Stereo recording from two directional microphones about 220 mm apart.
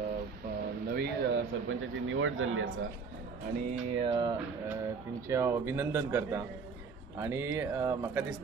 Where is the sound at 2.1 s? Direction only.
65° right (ahead or behind).